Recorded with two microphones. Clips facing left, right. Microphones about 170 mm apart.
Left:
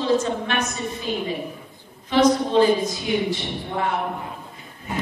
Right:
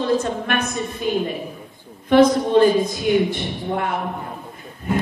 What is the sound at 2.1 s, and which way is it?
A woman's voice, 55° right (ahead or behind).